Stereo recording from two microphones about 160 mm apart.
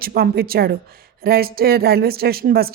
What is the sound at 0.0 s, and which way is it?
Speech, 70° right (ahead or behind).